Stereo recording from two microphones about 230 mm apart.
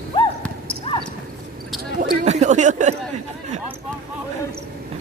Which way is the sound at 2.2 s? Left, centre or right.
Right.